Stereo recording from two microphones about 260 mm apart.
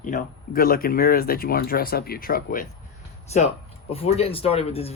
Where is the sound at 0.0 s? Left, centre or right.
Left.